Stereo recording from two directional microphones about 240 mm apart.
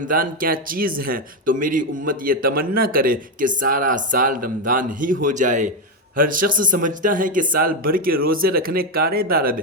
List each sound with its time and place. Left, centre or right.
0.1 s a man's voice: right